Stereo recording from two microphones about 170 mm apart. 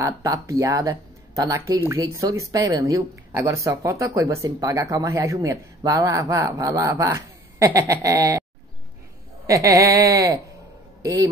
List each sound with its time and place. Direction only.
0.0 s speech: 20° right (ahead or behind)
9.5 s a man's voice: 20° right (ahead or behind)